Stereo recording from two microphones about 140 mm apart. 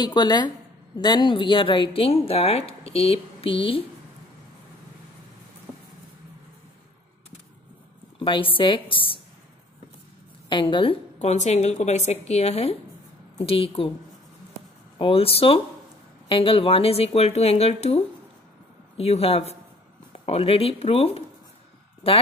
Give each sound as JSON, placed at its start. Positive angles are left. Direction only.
{"t": 0.0, "sound": "speech", "side_deg": 30}
{"t": 8.2, "sound": "speech", "side_deg": 40}
{"t": 10.5, "sound": "speech", "side_deg": 35}
{"t": 11.1, "sound": "speech", "side_deg": 55}
{"t": 15.0, "sound": "speech", "side_deg": 40}